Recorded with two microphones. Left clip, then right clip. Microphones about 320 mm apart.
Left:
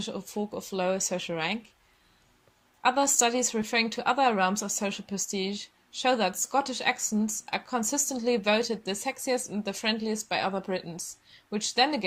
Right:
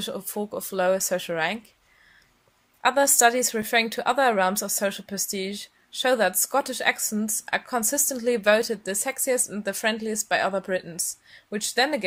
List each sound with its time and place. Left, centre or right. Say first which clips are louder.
0.0 s speech: right 3 dB; centre
2.8 s a woman's voice: right 5 dB; centre